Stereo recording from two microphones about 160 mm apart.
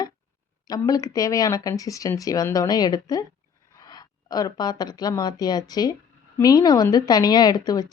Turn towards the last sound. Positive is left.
turn(degrees=25)  # may be behind; listen again after turning